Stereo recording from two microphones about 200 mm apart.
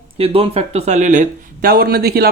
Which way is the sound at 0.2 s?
30° right (ahead or behind).